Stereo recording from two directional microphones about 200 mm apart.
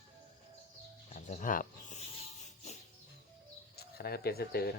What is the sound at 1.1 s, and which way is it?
Speech, 40° left (ahead or behind).